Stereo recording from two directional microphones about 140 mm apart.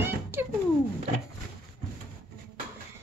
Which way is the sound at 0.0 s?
15° right (ahead or behind).